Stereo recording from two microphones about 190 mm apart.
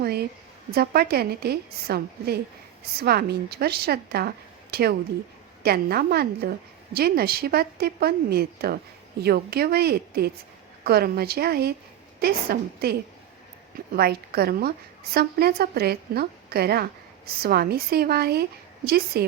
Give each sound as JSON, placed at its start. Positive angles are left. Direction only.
{"t": 0.0, "sound": "a woman's voice", "side_deg": -55}